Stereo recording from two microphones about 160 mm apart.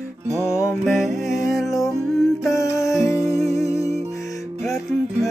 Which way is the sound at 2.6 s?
20° left (ahead or behind).